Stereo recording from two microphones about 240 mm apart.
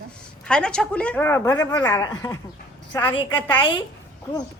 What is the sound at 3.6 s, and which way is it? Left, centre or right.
Speech, centre.